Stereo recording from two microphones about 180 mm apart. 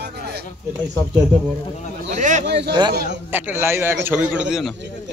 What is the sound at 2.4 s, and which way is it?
Speech, 70° right (ahead or behind).